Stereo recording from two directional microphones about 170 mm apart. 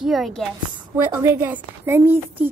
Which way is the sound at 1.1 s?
15° right (ahead or behind).